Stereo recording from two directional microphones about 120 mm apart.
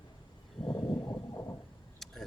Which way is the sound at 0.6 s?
30° left (ahead or behind).